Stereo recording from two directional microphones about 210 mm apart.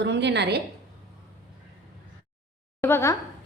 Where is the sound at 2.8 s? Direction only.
10° left (ahead or behind).